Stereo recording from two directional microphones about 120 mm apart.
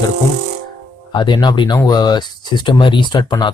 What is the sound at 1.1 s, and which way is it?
Speech, 40° left (ahead or behind).